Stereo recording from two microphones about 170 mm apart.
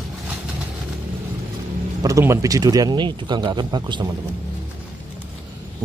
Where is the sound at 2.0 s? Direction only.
20° right (ahead or behind).